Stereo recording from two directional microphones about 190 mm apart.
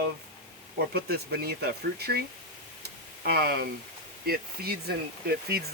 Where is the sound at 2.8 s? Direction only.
55° right (ahead or behind).